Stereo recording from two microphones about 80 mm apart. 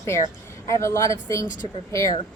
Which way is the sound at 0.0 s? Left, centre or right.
Left.